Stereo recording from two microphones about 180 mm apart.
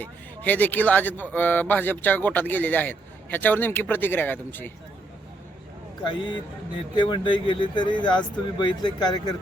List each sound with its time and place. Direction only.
0.0 s speech: 10° left (ahead or behind)
6.9 s speech: 25° left (ahead or behind)